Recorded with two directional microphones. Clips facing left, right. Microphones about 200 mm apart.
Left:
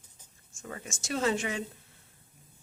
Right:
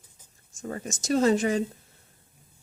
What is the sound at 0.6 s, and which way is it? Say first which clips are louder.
Speech: right 9 dB; 40° right (ahead or behind).